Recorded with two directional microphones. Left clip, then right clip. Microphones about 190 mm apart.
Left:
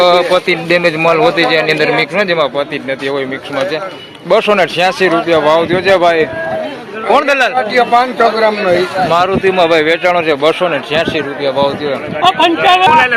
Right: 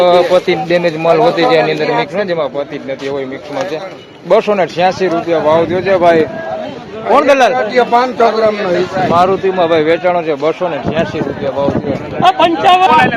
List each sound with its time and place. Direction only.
0.0 s a man's voice: 10° right (ahead or behind)
4.3 s speech: 5° right (ahead or behind)
7.7 s a man's voice: 60° right (ahead or behind)
8.7 s a man's voice: centre (ahead or behind)